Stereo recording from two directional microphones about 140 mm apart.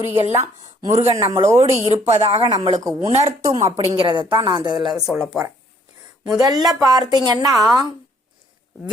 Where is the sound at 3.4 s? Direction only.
25° right (ahead or behind).